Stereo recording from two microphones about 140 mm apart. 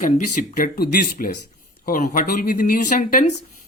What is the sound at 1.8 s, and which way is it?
Speech, 70° left (ahead or behind).